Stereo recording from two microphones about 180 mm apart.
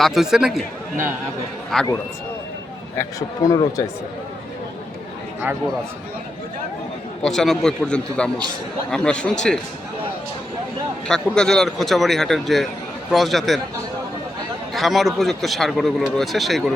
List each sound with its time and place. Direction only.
0.0 s a man's voice: centre (ahead or behind)
1.7 s a man's voice: centre (ahead or behind)
3.0 s speech: 20° left (ahead or behind)
7.2 s a man's voice: centre (ahead or behind)
11.1 s a man's voice: 5° left (ahead or behind)
14.7 s a man's voice: centre (ahead or behind)